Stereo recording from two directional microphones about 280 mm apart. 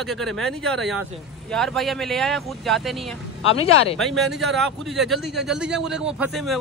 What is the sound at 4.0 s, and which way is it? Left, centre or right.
Speech, centre.